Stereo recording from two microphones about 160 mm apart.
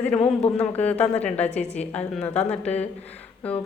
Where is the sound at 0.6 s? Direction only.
10° left (ahead or behind).